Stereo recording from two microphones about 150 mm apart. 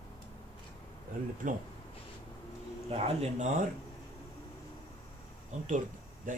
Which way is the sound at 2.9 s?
45° right (ahead or behind).